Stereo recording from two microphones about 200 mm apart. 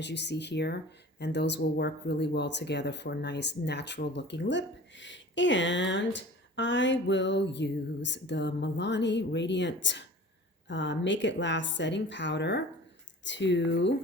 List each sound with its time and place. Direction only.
0.0 s speech: 60° left (ahead or behind)